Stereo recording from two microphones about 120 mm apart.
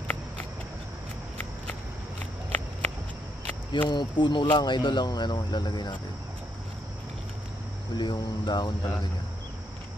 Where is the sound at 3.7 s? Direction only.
40° left (ahead or behind).